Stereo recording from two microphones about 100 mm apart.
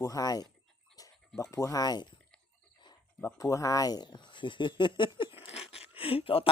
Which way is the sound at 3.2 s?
30° left (ahead or behind).